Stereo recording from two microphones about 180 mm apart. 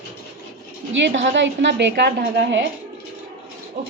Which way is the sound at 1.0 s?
80° right.